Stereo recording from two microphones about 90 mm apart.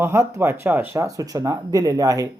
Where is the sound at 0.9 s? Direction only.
40° right (ahead or behind).